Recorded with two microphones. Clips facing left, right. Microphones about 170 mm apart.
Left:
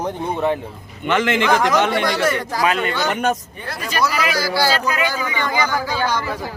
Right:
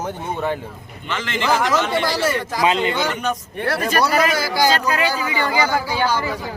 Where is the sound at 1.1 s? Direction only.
60° left (ahead or behind).